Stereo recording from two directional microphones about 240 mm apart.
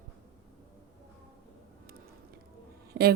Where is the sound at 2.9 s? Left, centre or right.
Right.